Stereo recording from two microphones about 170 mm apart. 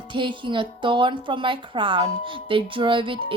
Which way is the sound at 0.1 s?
30° right (ahead or behind).